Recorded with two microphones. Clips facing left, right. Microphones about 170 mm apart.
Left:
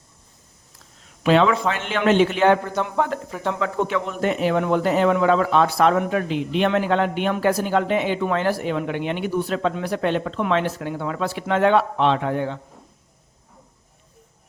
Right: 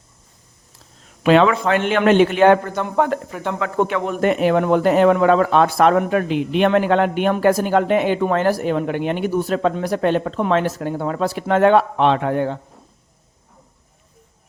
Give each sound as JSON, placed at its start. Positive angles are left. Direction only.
{"t": 1.2, "sound": "a man's voice", "side_deg": -60}